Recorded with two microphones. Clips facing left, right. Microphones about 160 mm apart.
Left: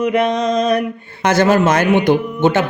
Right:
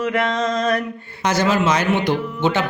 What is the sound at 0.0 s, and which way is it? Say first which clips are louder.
Mantra: left 5 dB; 20° left (ahead or behind).